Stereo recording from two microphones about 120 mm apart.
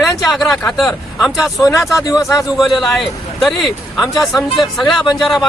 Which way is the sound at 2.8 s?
Centre (ahead or behind).